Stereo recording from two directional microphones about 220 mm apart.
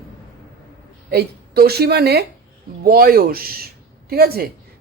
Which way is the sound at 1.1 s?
45° right (ahead or behind).